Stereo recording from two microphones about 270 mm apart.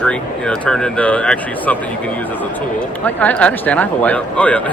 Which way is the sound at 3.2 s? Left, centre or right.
Centre.